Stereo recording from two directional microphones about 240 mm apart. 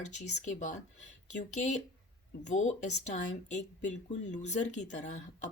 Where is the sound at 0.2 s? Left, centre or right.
Left.